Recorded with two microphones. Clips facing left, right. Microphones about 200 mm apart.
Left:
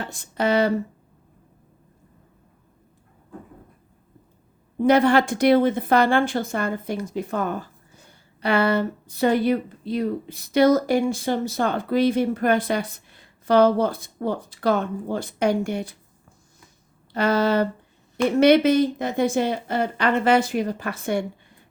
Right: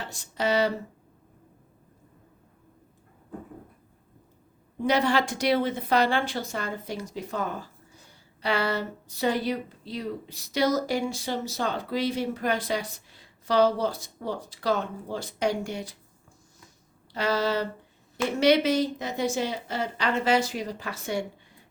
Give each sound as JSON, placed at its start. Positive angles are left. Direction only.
{"t": 0.0, "sound": "a woman's voice", "side_deg": 55}
{"t": 4.8, "sound": "a woman's voice", "side_deg": 55}
{"t": 17.1, "sound": "a woman's voice", "side_deg": 55}